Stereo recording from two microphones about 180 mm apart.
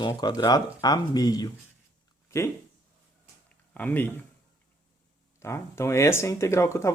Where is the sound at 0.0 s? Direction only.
25° left (ahead or behind).